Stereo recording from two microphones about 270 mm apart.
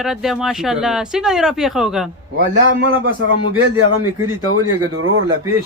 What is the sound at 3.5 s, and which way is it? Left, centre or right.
Speech, right.